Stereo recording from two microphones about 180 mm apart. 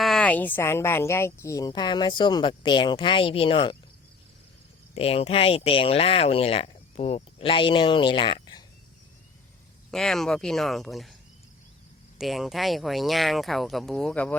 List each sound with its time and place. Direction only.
0.0 s speech: centre (ahead or behind); by 3.8 s 30° left (ahead or behind)
4.9 s speech: 35° left (ahead or behind)
9.9 s speech: 5° left (ahead or behind)
12.2 s speech: centre (ahead or behind)